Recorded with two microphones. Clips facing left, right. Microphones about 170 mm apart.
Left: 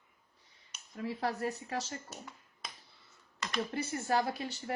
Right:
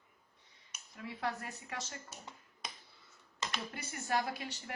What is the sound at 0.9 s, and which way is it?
Speech, 40° left (ahead or behind).